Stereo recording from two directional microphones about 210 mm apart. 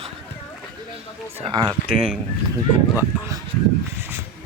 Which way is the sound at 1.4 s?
20° right (ahead or behind).